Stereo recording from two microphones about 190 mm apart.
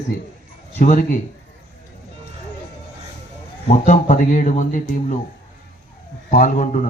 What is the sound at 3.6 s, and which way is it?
Speech, 40° left (ahead or behind).